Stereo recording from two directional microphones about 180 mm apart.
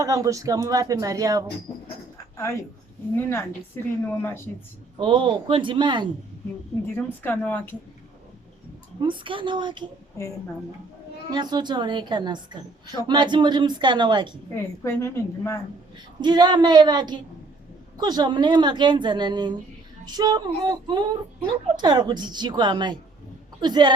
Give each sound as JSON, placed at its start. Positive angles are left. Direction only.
{"t": 0.0, "sound": "a woman's voice", "side_deg": -20}
{"t": 3.2, "sound": "a woman's voice", "side_deg": 15}
{"t": 4.9, "sound": "a woman's voice", "side_deg": -25}
{"t": 6.9, "sound": "a woman's voice", "side_deg": 10}
{"t": 9.0, "sound": "a woman's voice", "side_deg": -25}
{"t": 11.3, "sound": "a woman's voice", "side_deg": -25}
{"t": 14.5, "sound": "a woman's voice", "side_deg": 15}
{"t": 16.2, "sound": "a woman's voice", "side_deg": -25}